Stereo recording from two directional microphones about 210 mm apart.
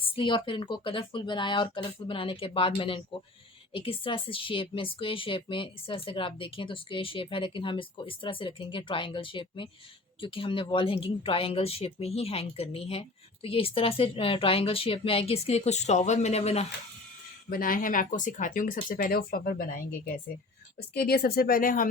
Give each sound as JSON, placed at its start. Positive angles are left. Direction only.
{"t": 0.0, "sound": "speech", "side_deg": 25}
{"t": 17.5, "sound": "speech", "side_deg": 40}